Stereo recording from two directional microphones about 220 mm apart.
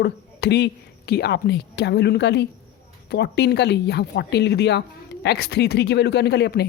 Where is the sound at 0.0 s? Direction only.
50° left (ahead or behind).